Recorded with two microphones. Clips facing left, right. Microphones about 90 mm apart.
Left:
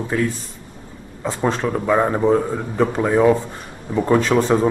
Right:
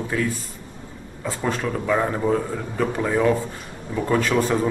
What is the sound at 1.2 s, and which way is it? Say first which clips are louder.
Speech: left 4 dB; 20° left (ahead or behind).